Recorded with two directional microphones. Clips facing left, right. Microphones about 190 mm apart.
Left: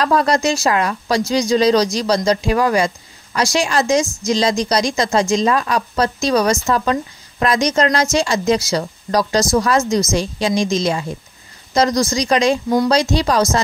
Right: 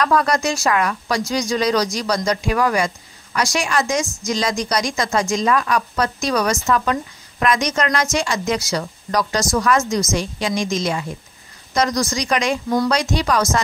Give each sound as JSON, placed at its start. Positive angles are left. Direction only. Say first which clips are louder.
{"t": 0.0, "sound": "a woman's voice", "louder": "left 2 dB", "side_deg": 30}